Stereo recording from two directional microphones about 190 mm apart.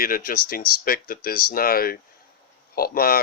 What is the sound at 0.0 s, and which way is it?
Speech, 50° left (ahead or behind).